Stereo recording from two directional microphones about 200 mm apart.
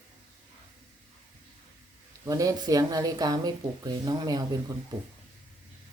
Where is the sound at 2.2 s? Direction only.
15° right (ahead or behind).